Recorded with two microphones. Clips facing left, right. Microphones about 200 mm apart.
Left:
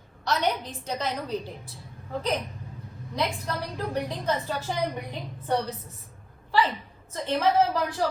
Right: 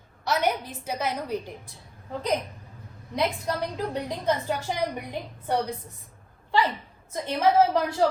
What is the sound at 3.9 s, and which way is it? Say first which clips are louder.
A woman's voice: left 1 dB; 15° right (ahead or behind).